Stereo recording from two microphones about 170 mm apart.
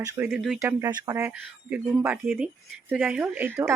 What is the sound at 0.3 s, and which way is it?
Speech, centre (ahead or behind).